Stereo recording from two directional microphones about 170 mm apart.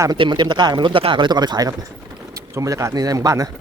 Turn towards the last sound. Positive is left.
turn(degrees=-20)  # may be behind; listen again after turning